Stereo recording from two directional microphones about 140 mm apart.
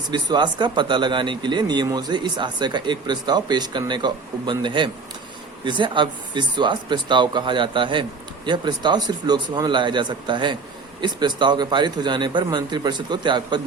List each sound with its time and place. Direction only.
0.1 s speech: 30° right (ahead or behind)